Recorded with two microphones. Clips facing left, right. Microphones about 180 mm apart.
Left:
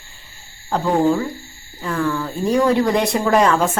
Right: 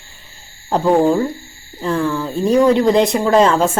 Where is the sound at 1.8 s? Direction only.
25° right (ahead or behind).